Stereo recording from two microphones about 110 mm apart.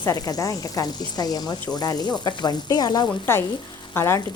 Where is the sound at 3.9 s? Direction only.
25° left (ahead or behind).